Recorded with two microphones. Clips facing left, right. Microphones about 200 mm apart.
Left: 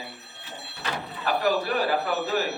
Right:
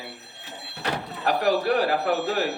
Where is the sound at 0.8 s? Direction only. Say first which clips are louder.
Right 3 dB; 75° right (ahead or behind).